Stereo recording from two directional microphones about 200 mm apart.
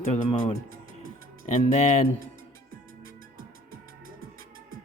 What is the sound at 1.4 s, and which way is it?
Speech, 35° left (ahead or behind).